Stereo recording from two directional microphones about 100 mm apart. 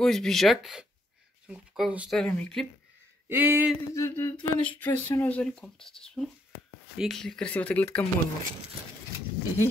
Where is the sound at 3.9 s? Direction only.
30° left (ahead or behind).